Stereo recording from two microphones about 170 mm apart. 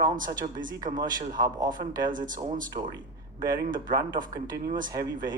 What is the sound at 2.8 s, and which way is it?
Speech, 35° right (ahead or behind).